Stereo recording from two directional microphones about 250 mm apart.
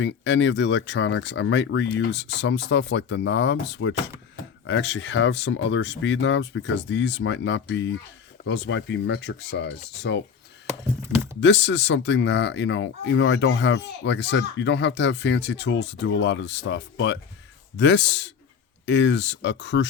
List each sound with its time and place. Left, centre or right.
0.0 s speech: left
11.3 s speech: left